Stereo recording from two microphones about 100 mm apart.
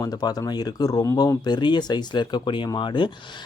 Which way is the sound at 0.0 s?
40° left (ahead or behind).